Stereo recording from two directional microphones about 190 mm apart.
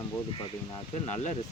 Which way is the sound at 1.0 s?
35° left (ahead or behind).